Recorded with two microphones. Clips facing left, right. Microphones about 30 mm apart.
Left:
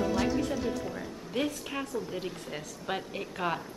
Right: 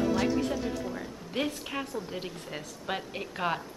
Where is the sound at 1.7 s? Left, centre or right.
Centre.